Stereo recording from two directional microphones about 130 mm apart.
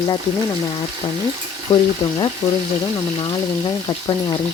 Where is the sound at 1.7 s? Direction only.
25° left (ahead or behind).